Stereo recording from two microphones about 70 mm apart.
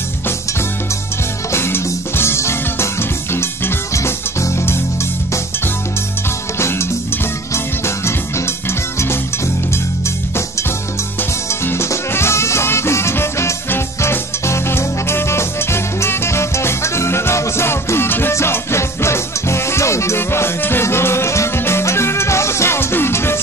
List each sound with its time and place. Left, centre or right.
1.5 s music: left
6.6 s music: left
11.6 s music: left